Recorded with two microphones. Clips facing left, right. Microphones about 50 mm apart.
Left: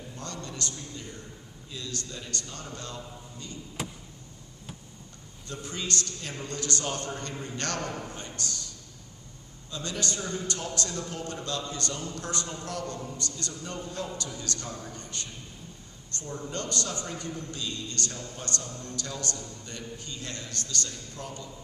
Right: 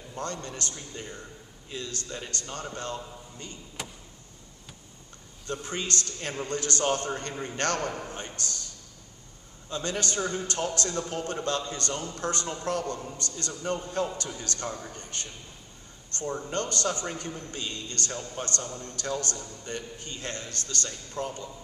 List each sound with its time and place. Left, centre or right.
0.1 s a man's voice: right
5.5 s a man's voice: right
9.7 s a man's voice: right